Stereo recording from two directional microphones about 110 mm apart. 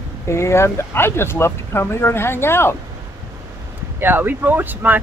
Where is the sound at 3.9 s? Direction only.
20° right (ahead or behind).